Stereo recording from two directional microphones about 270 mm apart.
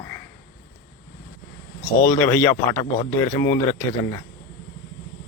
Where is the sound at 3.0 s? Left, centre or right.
Centre.